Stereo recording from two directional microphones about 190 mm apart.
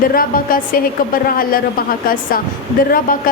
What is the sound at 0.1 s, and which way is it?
A woman's voice, 50° left (ahead or behind).